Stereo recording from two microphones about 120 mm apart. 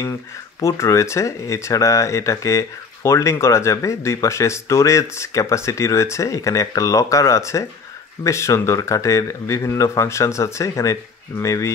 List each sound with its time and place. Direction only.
0.0 s speech: 25° left (ahead or behind)